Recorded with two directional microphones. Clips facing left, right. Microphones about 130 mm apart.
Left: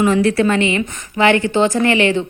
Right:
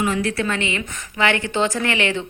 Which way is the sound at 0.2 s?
25° left (ahead or behind).